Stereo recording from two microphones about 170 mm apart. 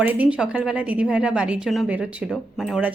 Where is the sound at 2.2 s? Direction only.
5° left (ahead or behind).